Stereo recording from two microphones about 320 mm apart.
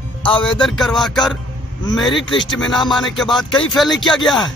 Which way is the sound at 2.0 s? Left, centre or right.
Centre.